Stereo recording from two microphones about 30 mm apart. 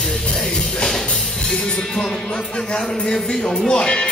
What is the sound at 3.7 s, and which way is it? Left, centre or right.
Music, left.